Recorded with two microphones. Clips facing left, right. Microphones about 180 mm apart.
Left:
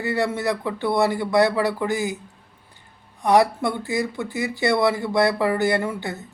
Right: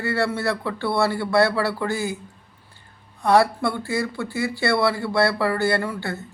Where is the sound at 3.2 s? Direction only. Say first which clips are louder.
Even; 20° left (ahead or behind).